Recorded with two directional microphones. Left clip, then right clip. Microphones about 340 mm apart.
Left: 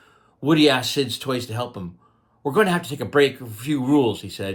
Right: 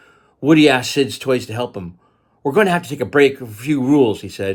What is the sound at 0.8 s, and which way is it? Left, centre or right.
Speech, right.